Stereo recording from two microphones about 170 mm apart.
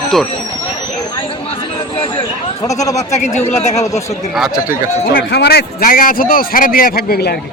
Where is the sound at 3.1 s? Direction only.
40° left (ahead or behind).